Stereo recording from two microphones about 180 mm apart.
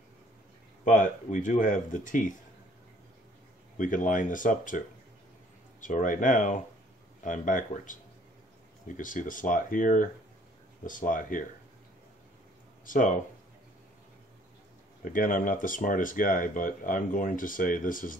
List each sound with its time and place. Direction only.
0.8 s speech: 45° left (ahead or behind)
3.7 s speech: 45° left (ahead or behind)
12.8 s speech: 45° left (ahead or behind)
15.0 s speech: 50° left (ahead or behind)